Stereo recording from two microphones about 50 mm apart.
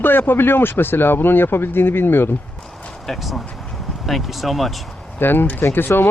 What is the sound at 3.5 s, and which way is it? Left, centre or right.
Vehicle, centre.